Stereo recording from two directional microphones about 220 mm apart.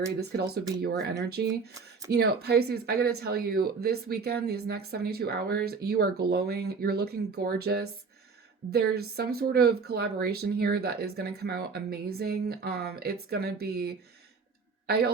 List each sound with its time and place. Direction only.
0.2 s speech: 45° right (ahead or behind)